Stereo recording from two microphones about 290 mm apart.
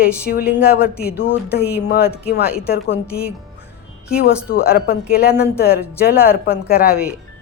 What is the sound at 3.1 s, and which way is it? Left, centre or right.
Speech, centre.